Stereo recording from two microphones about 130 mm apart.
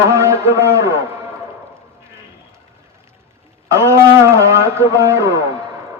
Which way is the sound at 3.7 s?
20° right (ahead or behind).